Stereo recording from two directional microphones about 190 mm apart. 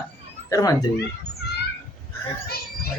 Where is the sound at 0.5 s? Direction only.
20° left (ahead or behind).